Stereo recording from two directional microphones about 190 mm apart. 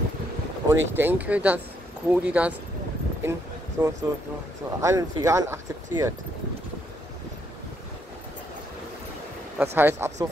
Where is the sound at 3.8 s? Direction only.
5° right (ahead or behind).